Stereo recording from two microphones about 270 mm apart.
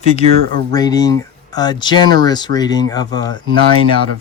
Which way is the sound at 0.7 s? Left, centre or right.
Centre.